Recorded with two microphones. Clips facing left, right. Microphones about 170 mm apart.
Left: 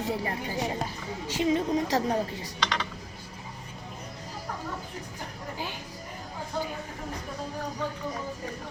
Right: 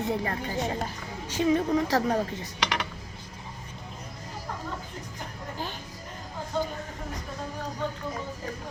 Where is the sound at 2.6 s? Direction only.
10° right (ahead or behind).